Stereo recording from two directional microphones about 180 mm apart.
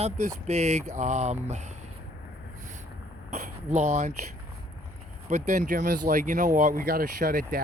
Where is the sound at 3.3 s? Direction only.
40° right (ahead or behind).